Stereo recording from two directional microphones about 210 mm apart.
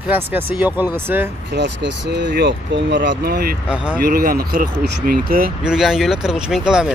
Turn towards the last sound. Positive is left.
turn(degrees=-5)  # may be behind; listen again after turning